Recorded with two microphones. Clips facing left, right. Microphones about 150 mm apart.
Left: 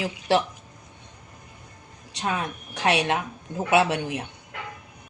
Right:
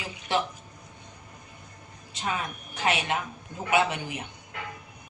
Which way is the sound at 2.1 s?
75° left (ahead or behind).